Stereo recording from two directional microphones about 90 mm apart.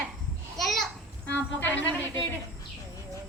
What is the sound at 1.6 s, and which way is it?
Speech, 20° left (ahead or behind).